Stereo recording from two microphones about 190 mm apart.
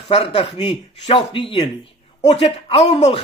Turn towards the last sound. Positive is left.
turn(degrees=35)  # may be behind; listen again after turning